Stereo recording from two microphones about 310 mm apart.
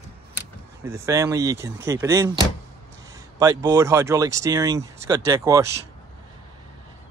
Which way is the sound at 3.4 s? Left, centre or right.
Centre.